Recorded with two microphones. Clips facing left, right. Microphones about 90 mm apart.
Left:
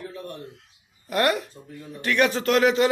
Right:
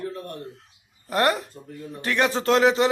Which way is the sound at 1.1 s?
30° right (ahead or behind).